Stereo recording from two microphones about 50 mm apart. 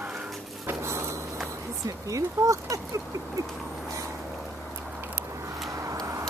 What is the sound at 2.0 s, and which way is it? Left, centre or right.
Speech, right.